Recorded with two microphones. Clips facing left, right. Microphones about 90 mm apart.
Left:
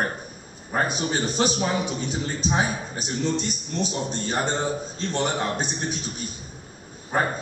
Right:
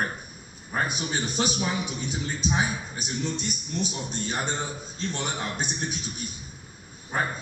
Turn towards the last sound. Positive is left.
turn(degrees=35)  # may be behind; listen again after turning